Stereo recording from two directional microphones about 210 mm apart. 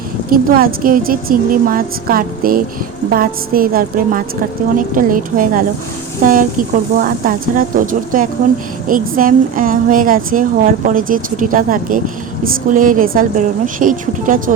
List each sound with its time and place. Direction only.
0.3 s a woman's voice: 45° right (ahead or behind)